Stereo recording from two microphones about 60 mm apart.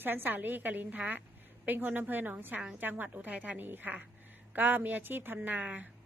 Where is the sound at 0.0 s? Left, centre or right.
Right.